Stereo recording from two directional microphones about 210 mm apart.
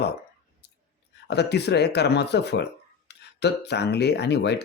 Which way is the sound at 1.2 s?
50° left (ahead or behind).